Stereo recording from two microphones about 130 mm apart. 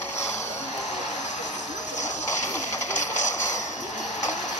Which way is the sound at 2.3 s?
65° left (ahead or behind).